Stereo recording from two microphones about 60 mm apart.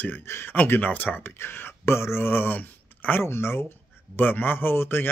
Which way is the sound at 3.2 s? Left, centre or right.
Left.